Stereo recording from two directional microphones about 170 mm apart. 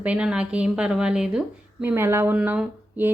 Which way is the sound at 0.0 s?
5° right (ahead or behind).